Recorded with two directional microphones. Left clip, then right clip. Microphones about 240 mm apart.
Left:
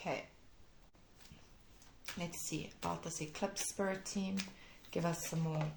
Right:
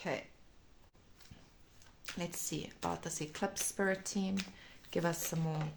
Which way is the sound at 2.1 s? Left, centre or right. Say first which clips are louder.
Right 2 dB; right.